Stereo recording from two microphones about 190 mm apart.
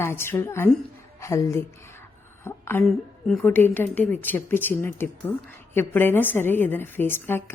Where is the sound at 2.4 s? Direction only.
15° left (ahead or behind).